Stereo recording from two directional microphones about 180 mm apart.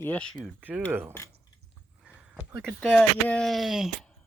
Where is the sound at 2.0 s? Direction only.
5° right (ahead or behind).